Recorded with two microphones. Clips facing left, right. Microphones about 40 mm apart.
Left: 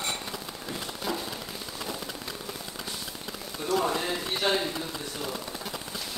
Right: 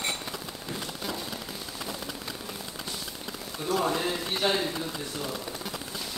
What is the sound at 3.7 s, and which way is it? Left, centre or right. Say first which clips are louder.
Speech: even; centre.